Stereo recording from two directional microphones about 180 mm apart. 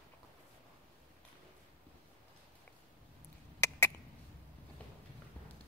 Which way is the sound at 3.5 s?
15° left (ahead or behind).